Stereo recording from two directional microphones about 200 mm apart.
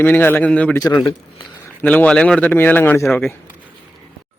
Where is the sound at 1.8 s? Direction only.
5° left (ahead or behind).